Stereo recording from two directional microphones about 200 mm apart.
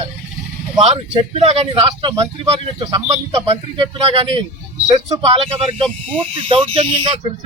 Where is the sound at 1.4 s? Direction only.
30° right (ahead or behind).